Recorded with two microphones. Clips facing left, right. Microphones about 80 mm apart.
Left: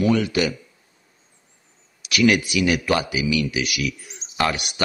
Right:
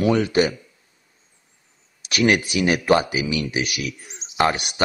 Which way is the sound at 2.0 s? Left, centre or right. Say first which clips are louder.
Left 1 dB; right.